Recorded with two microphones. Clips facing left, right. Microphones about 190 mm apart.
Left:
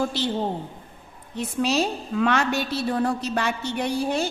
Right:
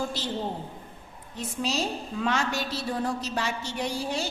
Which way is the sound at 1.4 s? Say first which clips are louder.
Left 6 dB; 65° left (ahead or behind).